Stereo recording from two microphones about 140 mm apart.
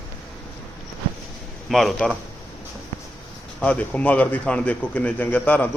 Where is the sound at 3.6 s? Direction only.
10° left (ahead or behind).